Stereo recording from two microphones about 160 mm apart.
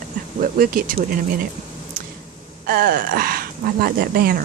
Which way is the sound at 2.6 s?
65° right (ahead or behind).